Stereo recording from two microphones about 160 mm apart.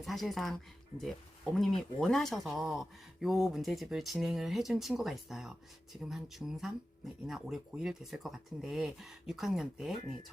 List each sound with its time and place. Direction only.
0.0 s speech: centre (ahead or behind)
1.5 s speech: centre (ahead or behind)